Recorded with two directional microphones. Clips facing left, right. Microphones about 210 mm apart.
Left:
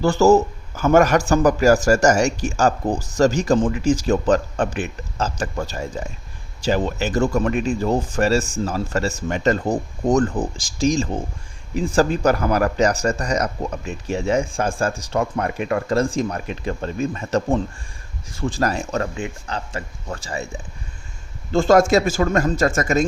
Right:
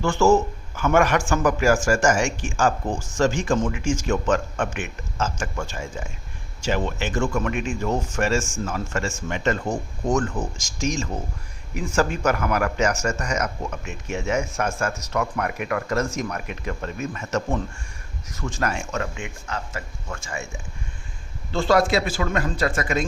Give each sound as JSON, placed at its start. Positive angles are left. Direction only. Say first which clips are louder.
{"t": 0.0, "sound": "a man's voice", "louder": "left 4 dB", "side_deg": 40}
{"t": 21.5, "sound": "speech", "louder": "left 5 dB", "side_deg": 45}